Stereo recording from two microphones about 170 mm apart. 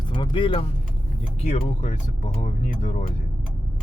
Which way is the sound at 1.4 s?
40° left (ahead or behind).